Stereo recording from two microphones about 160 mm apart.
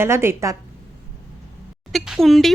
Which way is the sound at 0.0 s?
15° right (ahead or behind).